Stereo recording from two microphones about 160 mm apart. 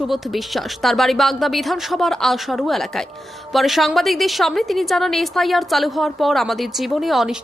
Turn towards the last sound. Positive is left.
turn(degrees=0)  # may be behind; listen again after turning